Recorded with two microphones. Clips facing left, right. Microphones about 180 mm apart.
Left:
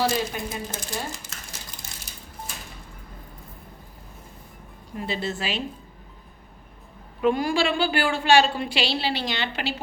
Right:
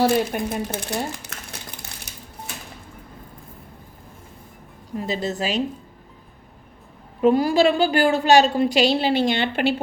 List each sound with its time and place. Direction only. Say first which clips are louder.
0.0 s speech: right 6 dB; 60° right (ahead or behind)
2.1 s crushing: right 3 dB; 70° right (ahead or behind)
4.9 s a woman's voice: right 4 dB; 40° right (ahead or behind)
7.2 s a woman's voice: right 6 dB; 40° right (ahead or behind)